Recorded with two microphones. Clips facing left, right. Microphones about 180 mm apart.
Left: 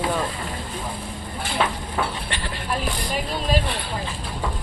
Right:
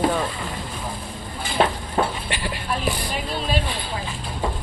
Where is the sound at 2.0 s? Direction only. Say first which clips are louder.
Right 4 dB; 30° right (ahead or behind).